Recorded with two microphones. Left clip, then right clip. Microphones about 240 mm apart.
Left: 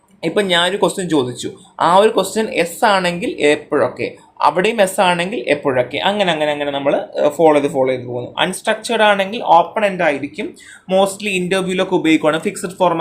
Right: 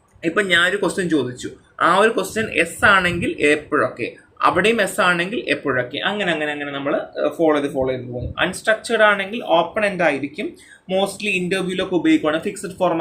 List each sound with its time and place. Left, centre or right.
0.3 s speech: left
9.7 s speech: centre
10.8 s speech: centre